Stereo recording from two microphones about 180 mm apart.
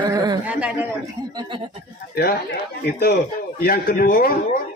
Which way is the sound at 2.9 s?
60° left (ahead or behind).